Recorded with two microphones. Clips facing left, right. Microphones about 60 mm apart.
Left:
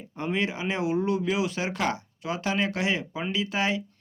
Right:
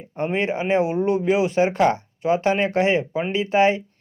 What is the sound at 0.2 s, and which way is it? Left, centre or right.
Speech, right.